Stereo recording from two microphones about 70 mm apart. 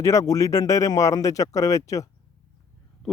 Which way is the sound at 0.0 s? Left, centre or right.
Left.